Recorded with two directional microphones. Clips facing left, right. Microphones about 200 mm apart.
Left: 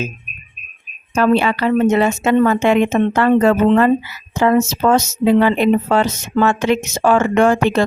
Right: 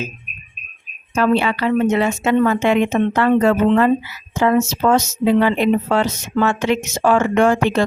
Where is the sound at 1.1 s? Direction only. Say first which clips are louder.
Left 2 dB; 45° left (ahead or behind).